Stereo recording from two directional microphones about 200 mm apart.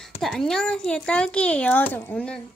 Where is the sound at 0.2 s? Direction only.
Centre (ahead or behind).